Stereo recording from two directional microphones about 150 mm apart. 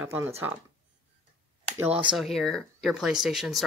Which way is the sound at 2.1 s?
Centre (ahead or behind).